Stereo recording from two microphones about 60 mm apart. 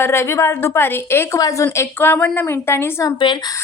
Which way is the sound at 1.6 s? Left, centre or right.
Left.